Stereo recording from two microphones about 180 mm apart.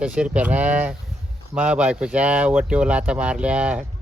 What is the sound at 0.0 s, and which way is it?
Speech, 5° right (ahead or behind).